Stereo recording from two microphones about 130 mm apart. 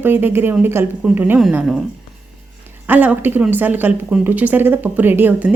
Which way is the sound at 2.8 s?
10° right (ahead or behind).